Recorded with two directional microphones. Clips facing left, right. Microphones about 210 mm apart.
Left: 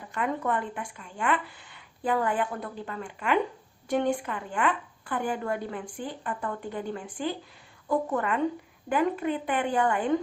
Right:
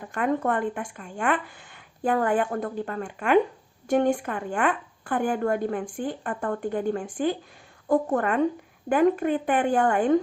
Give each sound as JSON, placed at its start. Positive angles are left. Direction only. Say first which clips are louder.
{"t": 0.1, "sound": "speech", "louder": "right 4 dB", "side_deg": -50}